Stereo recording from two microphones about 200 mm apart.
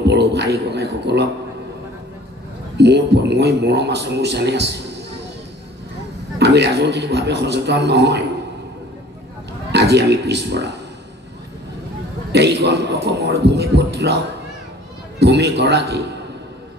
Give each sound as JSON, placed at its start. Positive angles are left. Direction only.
{"t": 0.1, "sound": "a man's voice", "side_deg": -55}
{"t": 2.8, "sound": "a man's voice", "side_deg": -55}
{"t": 6.3, "sound": "a man's voice", "side_deg": -55}
{"t": 9.7, "sound": "a man's voice", "side_deg": -55}
{"t": 12.3, "sound": "a man's voice", "side_deg": -55}